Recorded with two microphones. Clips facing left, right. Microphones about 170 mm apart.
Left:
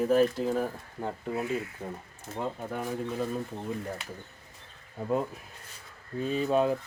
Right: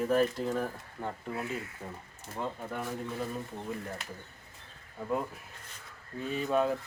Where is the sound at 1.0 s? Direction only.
20° left (ahead or behind).